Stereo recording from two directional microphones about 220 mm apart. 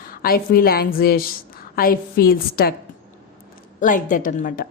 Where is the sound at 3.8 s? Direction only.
35° left (ahead or behind).